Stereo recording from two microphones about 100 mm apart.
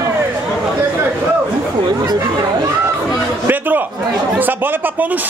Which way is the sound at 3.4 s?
15° right (ahead or behind).